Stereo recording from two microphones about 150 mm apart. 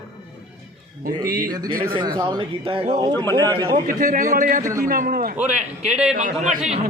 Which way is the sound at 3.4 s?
25° right (ahead or behind).